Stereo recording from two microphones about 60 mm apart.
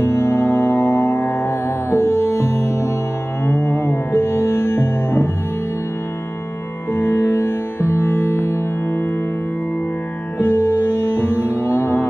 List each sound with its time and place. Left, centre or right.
0.0 s music: left
6.9 s music: left
10.4 s music: left